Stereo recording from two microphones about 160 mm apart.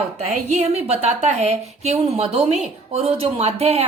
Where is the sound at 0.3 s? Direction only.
45° right (ahead or behind).